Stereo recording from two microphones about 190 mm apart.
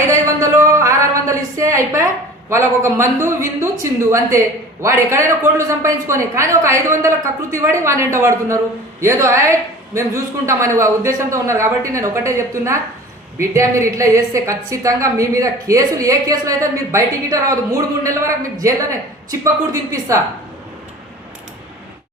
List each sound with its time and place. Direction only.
0.1 s a sound: 15° right (ahead or behind)
2.5 s a woman's voice: 15° right (ahead or behind)
19.9 s a woman's voice: 15° right (ahead or behind)